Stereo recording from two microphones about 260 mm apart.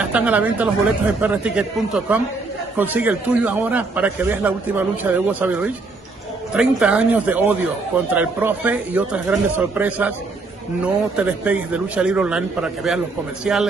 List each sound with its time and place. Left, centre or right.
0.0 s a man's voice: centre